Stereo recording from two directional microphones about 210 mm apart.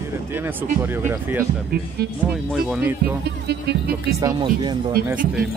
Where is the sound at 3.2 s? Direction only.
50° right (ahead or behind).